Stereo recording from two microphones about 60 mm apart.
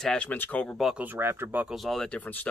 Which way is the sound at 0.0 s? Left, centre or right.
Centre.